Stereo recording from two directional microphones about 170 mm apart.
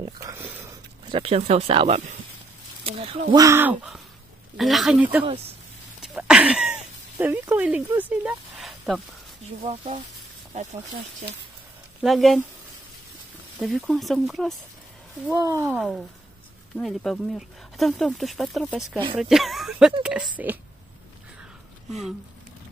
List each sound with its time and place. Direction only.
0.0 s a sound: 20° right (ahead or behind)
1.1 s speech: 35° right (ahead or behind)
3.3 s speech: 20° right (ahead or behind)
4.6 s speech: centre (ahead or behind)
9.6 s speech: 40° right (ahead or behind)
12.0 s speech: centre (ahead or behind)
13.6 s speech: centre (ahead or behind)
15.3 s speech: 20° right (ahead or behind)
16.7 s speech: 5° left (ahead or behind)